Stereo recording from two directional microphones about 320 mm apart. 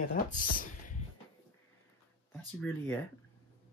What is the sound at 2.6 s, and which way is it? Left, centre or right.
Speech, centre.